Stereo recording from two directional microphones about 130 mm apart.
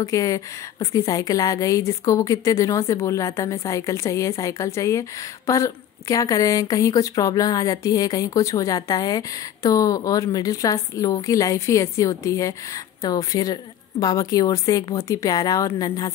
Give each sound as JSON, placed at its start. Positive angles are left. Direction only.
{"t": 0.0, "sound": "a woman's voice", "side_deg": 25}